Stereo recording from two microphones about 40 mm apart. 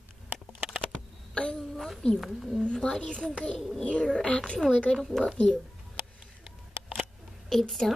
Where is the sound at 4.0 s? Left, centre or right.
Centre.